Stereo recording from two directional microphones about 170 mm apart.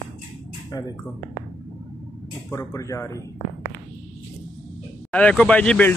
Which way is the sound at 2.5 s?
20° left (ahead or behind).